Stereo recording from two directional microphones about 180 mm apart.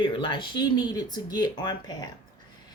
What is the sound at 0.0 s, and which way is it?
Speech, 25° left (ahead or behind).